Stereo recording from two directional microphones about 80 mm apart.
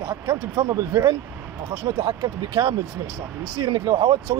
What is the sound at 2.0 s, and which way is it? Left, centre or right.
Speech, right.